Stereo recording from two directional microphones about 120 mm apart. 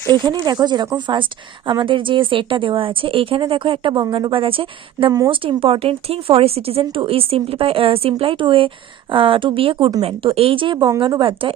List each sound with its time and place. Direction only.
0.1 s speech: 40° right (ahead or behind)
10.0 s speech: 55° right (ahead or behind)